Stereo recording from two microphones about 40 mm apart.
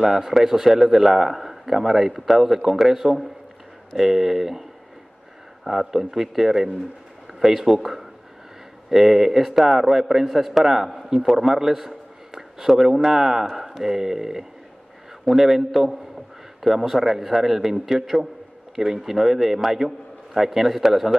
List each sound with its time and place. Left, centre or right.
0.0 s a man's voice: centre